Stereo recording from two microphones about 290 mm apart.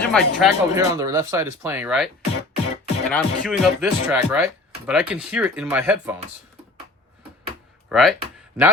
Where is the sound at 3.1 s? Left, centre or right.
Centre.